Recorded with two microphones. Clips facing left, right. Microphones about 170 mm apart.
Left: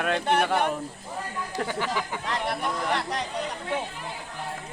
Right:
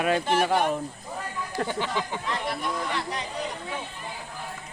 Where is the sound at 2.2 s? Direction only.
65° left (ahead or behind).